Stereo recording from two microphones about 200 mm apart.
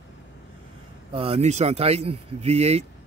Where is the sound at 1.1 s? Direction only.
30° right (ahead or behind).